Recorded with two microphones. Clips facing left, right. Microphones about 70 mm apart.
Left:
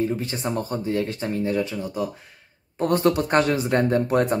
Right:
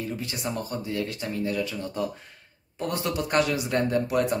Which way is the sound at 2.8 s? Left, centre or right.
Left.